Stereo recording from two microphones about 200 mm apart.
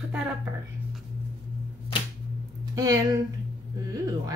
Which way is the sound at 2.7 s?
15° right (ahead or behind).